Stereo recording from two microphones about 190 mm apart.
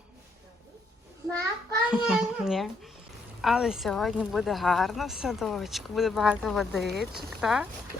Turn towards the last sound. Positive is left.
turn(degrees=-5)  # may be behind; listen again after turning